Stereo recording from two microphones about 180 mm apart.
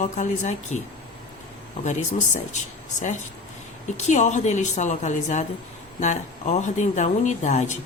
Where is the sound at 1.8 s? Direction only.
40° left (ahead or behind).